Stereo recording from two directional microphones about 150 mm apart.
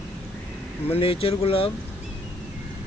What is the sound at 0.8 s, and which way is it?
Speech, 40° left (ahead or behind).